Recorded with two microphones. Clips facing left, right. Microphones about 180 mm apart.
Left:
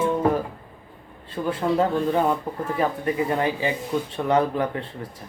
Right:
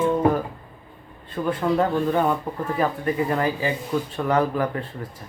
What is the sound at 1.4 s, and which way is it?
Speech, 20° left (ahead or behind).